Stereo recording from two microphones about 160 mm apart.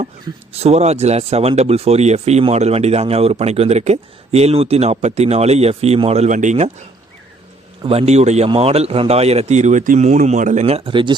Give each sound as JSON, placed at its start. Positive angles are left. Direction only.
{"t": 0.5, "sound": "speech", "side_deg": -40}
{"t": 7.9, "sound": "a man's voice", "side_deg": -40}